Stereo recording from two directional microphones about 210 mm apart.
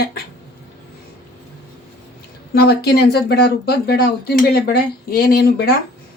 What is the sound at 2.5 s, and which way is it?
Speech, 50° left (ahead or behind).